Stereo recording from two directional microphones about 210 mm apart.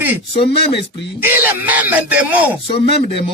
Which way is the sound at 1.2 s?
10° right (ahead or behind).